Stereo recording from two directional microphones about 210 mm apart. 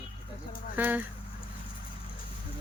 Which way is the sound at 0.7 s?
10° right (ahead or behind).